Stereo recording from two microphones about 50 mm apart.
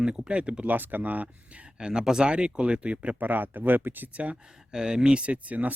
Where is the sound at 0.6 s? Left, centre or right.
Right.